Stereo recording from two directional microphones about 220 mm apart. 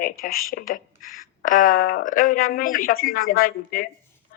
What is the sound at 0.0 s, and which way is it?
Speech, 40° left (ahead or behind).